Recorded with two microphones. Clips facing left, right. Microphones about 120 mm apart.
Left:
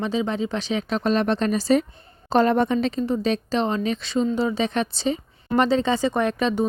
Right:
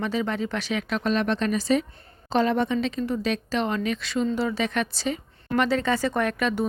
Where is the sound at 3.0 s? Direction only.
30° left (ahead or behind).